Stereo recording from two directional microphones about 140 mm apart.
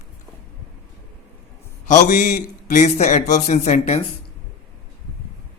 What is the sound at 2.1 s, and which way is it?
A man's voice, 65° left (ahead or behind).